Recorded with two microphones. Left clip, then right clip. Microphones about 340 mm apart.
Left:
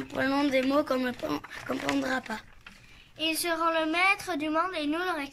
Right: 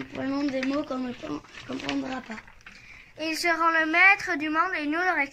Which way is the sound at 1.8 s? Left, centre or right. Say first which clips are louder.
Left 2 dB; left.